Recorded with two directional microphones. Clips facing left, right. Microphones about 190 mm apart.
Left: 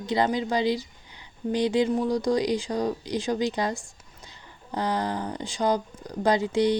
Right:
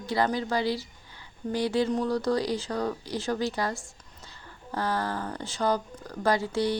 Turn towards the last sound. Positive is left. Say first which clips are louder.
# left 4 dB
turn(degrees=20)  # may be behind; listen again after turning